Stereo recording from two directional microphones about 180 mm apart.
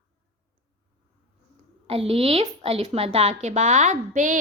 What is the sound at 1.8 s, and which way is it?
A woman's voice, 30° right (ahead or behind).